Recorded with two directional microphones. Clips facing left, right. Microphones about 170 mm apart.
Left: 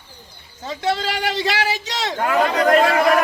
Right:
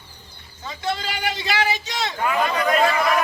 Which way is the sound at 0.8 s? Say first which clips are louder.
Left 4 dB; 75° left (ahead or behind).